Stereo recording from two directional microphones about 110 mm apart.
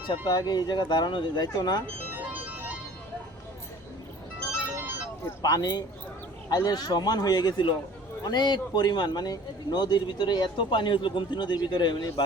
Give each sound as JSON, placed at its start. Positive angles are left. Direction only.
{"t": 0.3, "sound": "speech", "side_deg": 35}
{"t": 2.0, "sound": "music", "side_deg": -15}
{"t": 5.2, "sound": "speech", "side_deg": 35}